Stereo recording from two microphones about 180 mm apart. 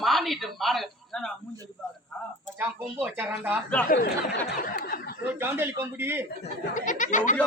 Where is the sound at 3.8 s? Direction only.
55° left (ahead or behind).